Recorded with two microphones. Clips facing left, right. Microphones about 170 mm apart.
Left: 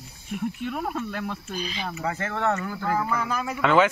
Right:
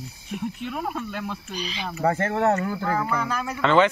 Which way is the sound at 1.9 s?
45° right (ahead or behind).